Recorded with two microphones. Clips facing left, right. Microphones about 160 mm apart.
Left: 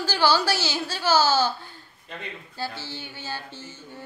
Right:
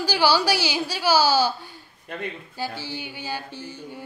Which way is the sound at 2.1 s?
55° right (ahead or behind).